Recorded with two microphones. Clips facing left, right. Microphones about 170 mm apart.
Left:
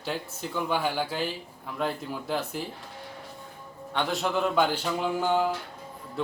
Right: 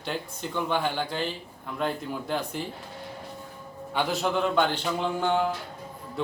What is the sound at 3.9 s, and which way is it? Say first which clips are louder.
Speech: right 1 dB; 5° right (ahead or behind).